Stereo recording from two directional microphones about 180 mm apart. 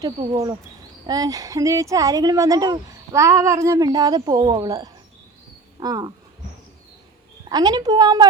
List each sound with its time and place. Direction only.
1.0 s speech: 20° right (ahead or behind)
7.5 s speech: 20° right (ahead or behind)